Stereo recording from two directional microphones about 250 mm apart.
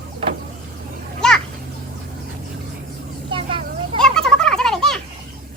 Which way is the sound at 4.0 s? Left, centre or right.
Centre.